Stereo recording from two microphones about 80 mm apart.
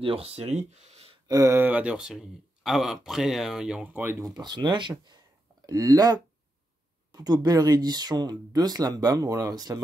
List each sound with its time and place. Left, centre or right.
1.2 s a sound: right
1.5 s speech: right; by 3.8 s centre
3.8 s speech: right
4.3 s speech: right
5.7 s speech: right